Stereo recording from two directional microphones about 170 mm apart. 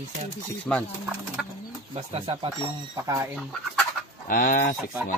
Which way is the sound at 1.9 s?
35° right (ahead or behind).